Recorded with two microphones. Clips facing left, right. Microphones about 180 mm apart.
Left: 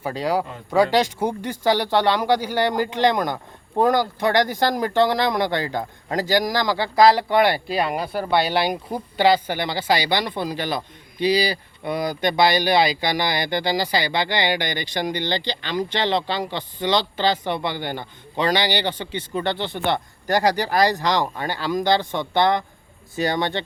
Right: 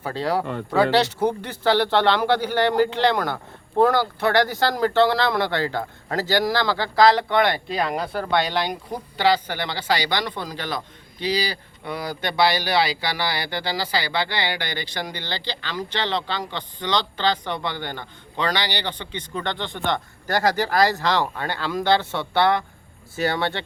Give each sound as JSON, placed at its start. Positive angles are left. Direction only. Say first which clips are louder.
{"t": 0.0, "sound": "speech", "louder": "left 1 dB", "side_deg": 10}